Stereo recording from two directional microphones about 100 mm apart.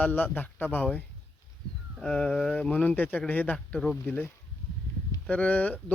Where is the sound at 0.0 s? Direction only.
15° left (ahead or behind).